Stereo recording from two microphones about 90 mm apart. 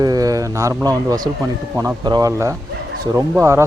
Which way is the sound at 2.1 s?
50° right (ahead or behind).